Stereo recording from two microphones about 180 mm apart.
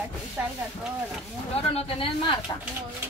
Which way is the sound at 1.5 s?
35° left (ahead or behind).